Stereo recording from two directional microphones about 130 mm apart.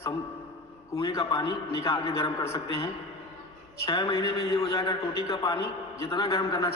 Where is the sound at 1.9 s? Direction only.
20° left (ahead or behind).